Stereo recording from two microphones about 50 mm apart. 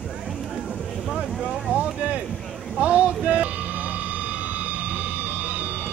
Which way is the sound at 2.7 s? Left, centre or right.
Right.